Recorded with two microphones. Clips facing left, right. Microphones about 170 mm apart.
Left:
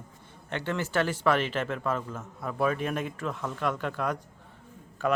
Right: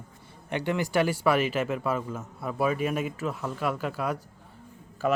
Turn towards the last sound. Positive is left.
turn(degrees=-5)  # may be behind; listen again after turning